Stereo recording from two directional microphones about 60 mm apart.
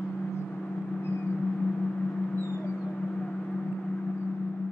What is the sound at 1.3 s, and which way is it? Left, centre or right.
Vehicle, centre.